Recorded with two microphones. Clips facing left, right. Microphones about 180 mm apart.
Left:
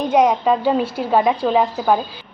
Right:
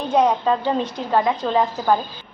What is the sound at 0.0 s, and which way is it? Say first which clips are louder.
A woman's voice: left 3 dB; 10° left (ahead or behind).